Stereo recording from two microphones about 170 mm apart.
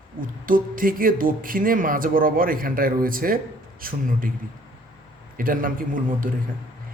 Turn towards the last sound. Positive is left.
turn(degrees=-55)  # may be behind; listen again after turning